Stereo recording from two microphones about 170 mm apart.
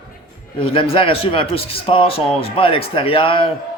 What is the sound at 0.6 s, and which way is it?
A man's voice, 35° left (ahead or behind).